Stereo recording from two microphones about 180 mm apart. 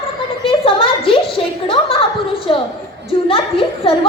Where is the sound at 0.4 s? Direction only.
30° left (ahead or behind).